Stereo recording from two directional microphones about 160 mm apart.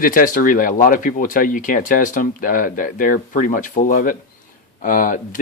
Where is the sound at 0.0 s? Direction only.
60° left (ahead or behind).